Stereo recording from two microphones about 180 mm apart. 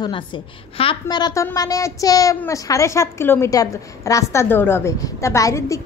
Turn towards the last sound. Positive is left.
turn(degrees=15)  # may be behind; listen again after turning